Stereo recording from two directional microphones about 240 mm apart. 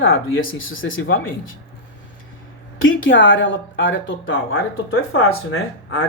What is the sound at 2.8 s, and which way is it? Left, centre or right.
Speech, left.